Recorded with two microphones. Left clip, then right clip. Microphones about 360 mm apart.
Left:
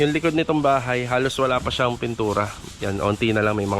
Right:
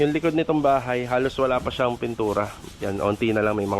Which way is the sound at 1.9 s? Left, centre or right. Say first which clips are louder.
Left 1 dB; right.